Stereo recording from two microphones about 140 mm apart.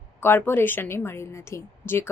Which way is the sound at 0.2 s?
15° left (ahead or behind).